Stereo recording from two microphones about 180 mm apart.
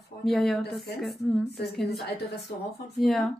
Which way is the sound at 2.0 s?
65° left (ahead or behind).